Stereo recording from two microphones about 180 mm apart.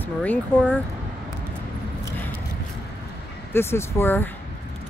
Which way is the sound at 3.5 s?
15° left (ahead or behind).